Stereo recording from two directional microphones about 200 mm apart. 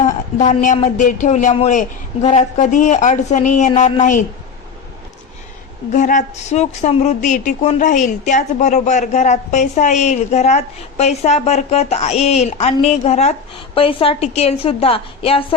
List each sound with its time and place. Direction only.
0.0 s speech: 40° left (ahead or behind)
5.9 s a woman's voice: 40° left (ahead or behind)